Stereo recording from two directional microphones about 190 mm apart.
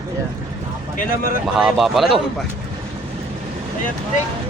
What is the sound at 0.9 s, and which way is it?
Speech, 50° left (ahead or behind).